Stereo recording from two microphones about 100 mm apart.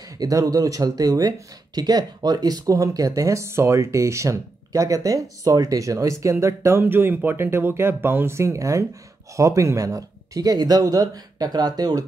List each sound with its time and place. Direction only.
0.2 s speech: 35° right (ahead or behind)